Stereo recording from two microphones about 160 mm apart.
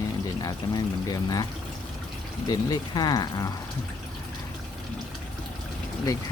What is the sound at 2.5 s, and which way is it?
Speech, 25° left (ahead or behind).